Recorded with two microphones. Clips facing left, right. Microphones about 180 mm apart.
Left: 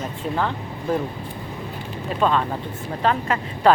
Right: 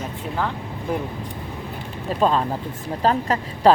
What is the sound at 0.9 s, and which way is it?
Speech, 15° right (ahead or behind).